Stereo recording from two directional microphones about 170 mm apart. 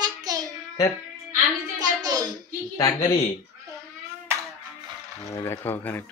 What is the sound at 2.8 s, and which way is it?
Speech, 20° left (ahead or behind).